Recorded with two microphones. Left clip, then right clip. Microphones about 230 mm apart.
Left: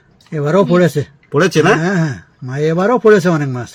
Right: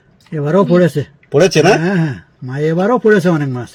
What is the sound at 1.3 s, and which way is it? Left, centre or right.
Speech, centre.